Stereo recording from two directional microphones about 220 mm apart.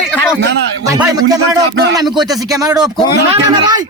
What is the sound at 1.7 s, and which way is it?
Speech, 50° right (ahead or behind).